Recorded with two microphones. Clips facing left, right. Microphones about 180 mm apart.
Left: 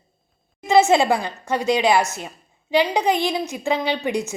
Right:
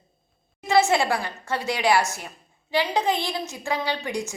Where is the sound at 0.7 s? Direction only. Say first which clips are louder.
Left 5 dB; 20° left (ahead or behind).